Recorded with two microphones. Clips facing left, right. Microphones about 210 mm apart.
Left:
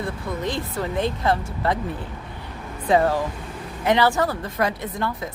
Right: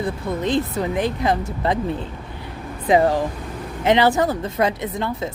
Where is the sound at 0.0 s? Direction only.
20° right (ahead or behind).